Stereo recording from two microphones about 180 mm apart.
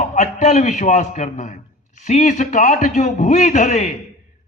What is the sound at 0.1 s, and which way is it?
A man's voice, 40° left (ahead or behind).